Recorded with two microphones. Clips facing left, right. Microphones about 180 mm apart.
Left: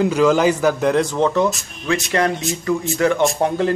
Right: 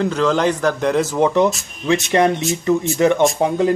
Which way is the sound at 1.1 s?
15° right (ahead or behind).